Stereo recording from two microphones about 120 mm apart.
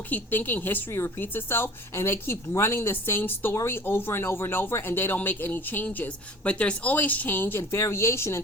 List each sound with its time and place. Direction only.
0.1 s a woman's voice: 15° left (ahead or behind)